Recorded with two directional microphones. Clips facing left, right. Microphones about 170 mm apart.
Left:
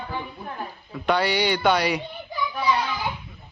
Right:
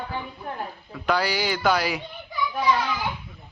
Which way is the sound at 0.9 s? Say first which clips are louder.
Left 2 dB; centre (ahead or behind).